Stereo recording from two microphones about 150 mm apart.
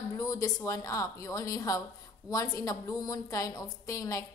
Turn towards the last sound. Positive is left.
turn(degrees=20)  # may be behind; listen again after turning